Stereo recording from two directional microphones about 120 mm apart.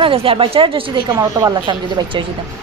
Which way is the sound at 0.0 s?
50° right (ahead or behind).